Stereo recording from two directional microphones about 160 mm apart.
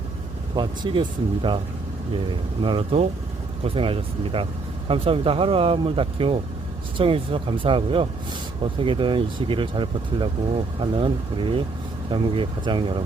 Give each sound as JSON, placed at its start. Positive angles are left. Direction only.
{"t": 0.5, "sound": "speech", "side_deg": -25}
{"t": 2.6, "sound": "speech", "side_deg": -35}